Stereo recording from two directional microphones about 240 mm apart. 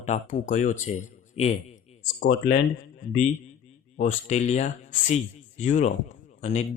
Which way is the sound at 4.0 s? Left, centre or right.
Left.